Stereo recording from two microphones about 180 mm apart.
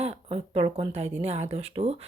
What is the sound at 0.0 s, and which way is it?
Speech, 35° right (ahead or behind).